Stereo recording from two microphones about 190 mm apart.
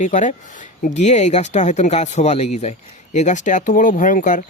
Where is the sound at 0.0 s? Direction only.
40° left (ahead or behind).